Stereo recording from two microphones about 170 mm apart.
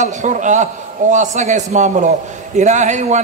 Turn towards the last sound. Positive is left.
turn(degrees=-45)  # may be behind; listen again after turning